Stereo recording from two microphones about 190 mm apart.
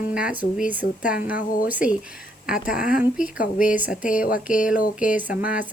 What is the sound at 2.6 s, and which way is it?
Speech, 45° left (ahead or behind).